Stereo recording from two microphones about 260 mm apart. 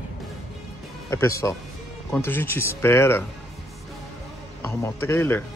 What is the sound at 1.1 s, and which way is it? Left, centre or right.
Speech, centre.